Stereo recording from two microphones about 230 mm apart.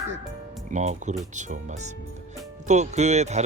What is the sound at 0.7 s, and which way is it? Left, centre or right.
Speech, right.